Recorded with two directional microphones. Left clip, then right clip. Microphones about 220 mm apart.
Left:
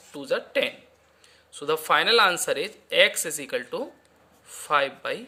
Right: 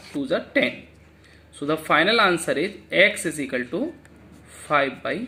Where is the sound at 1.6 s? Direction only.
35° left (ahead or behind).